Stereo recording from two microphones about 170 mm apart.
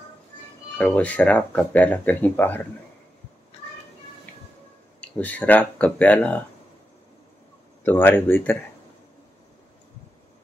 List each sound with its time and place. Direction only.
0.7 s speech: 10° left (ahead or behind)
5.0 s speech: 10° left (ahead or behind)
7.8 s speech: 10° left (ahead or behind)